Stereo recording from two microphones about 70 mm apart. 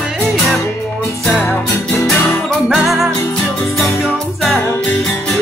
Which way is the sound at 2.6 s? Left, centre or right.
Centre.